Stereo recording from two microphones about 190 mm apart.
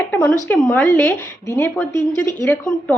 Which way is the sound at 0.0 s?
10° left (ahead or behind).